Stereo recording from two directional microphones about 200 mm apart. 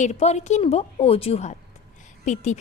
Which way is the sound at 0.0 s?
35° left (ahead or behind).